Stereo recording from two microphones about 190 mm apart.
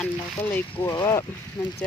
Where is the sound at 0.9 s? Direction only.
20° left (ahead or behind).